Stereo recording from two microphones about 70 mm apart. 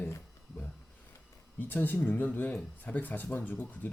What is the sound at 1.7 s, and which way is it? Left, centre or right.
Speech, left.